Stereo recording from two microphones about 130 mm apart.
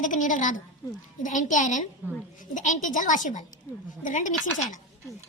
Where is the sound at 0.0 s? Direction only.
85° left.